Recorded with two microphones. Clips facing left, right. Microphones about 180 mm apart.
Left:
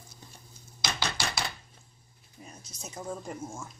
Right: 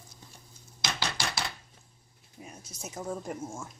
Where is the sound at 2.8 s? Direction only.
5° right (ahead or behind).